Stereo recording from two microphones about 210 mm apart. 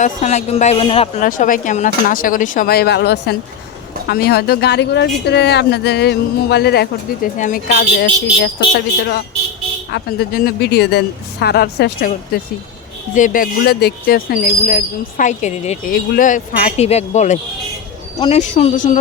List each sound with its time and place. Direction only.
0.0 s speech: 35° left (ahead or behind)
9.9 s speech: 45° left (ahead or behind)